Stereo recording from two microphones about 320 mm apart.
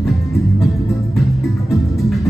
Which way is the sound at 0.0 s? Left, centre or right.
Centre.